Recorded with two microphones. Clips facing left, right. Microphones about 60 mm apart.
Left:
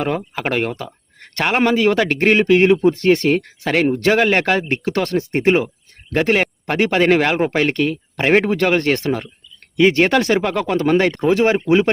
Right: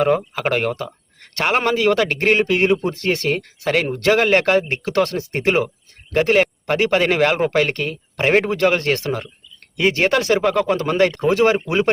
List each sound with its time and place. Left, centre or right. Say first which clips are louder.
0.4 s speech: left 1 dB; left